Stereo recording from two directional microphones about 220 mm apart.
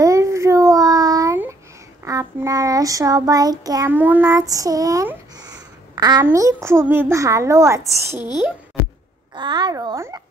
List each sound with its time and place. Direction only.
0.0 s a sound: 15° right (ahead or behind)
2.0 s child singing: 15° right (ahead or behind)
8.2 s a child's voice: 20° left (ahead or behind)
9.3 s a child's voice: 20° right (ahead or behind)